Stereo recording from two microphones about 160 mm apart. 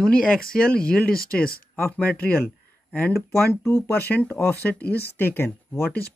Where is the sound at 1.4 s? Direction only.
70° left (ahead or behind).